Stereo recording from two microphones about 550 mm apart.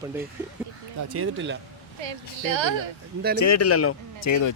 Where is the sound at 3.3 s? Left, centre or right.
Left.